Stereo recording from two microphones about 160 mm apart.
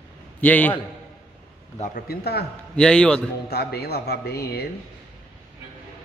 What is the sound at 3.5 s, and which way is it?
Speech, 85° left.